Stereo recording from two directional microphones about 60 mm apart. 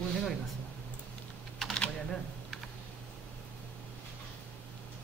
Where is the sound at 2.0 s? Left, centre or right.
Centre.